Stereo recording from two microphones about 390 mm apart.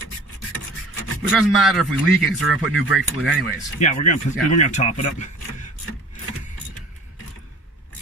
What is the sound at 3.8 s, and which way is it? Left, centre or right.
Speech, centre.